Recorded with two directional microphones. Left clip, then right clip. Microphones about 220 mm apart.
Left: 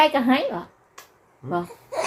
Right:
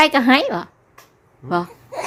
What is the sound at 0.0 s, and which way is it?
Speech, 35° right (ahead or behind).